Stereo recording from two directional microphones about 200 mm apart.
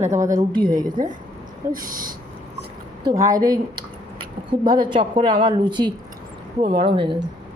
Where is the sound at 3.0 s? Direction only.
15° right (ahead or behind).